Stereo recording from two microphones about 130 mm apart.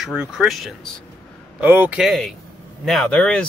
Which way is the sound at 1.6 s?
15° right (ahead or behind).